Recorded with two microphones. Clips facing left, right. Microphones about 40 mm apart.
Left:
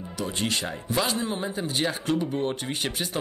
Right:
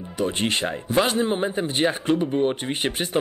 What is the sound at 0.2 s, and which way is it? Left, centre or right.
Speech, right.